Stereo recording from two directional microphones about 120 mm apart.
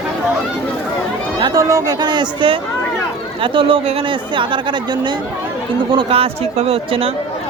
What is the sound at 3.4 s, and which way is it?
Speech, 45° right (ahead or behind).